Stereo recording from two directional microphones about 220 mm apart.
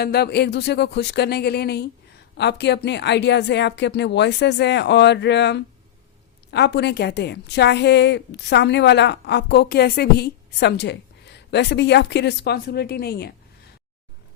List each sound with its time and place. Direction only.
0.0 s a woman's voice: 45° left (ahead or behind)